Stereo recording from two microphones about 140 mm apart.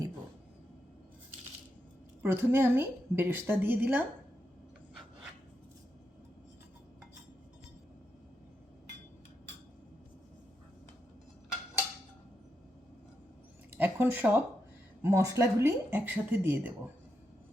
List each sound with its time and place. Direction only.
2.2 s a woman's voice: 15° right (ahead or behind)
13.7 s a sound: 15° right (ahead or behind)
15.0 s speech: 20° right (ahead or behind)